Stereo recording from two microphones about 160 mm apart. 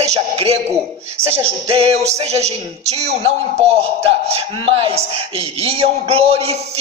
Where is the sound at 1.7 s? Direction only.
40° right (ahead or behind).